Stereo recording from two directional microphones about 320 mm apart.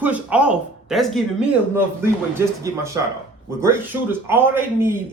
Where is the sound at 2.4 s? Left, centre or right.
Centre.